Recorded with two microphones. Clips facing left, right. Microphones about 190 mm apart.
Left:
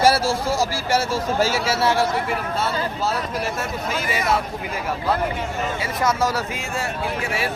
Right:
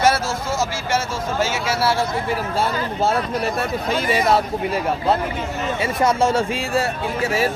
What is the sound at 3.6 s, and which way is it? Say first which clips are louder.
Speech: right 4 dB; 30° right (ahead or behind).